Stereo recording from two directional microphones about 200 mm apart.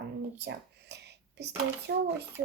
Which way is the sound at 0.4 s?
55° right (ahead or behind).